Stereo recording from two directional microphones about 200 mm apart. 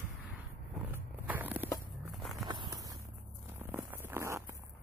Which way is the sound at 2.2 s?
Centre (ahead or behind).